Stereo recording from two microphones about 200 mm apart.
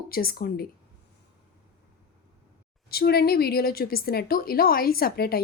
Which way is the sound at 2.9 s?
50° left (ahead or behind).